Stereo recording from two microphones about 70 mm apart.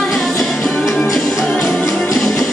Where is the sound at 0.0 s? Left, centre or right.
Centre.